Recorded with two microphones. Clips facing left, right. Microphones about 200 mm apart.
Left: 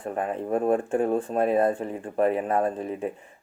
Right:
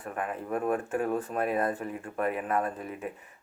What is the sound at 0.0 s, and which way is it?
Speech, 30° left (ahead or behind).